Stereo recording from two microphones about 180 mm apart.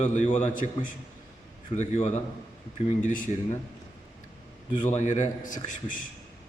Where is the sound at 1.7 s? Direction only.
40° left (ahead or behind).